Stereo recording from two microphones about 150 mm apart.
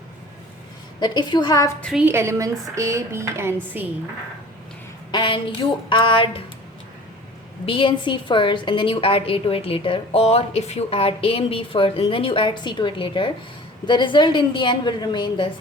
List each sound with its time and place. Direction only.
0.9 s a woman's voice: 30° left (ahead or behind)
2.0 s speech: 15° right (ahead or behind)
5.1 s a woman's voice: 35° left (ahead or behind)
7.6 s a woman's voice: 35° left (ahead or behind)